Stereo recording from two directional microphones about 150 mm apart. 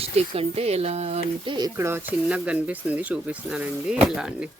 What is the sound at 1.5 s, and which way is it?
Speech, 20° right (ahead or behind).